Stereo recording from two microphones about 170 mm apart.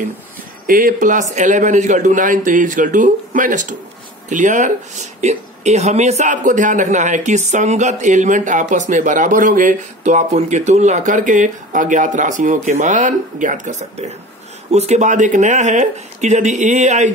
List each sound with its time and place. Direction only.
0.7 s speech: 55° right (ahead or behind)